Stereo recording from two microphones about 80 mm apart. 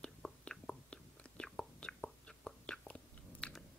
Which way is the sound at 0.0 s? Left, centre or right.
Centre.